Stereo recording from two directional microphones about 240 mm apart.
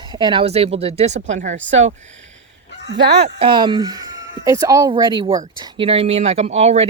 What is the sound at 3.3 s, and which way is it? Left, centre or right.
Speech, right.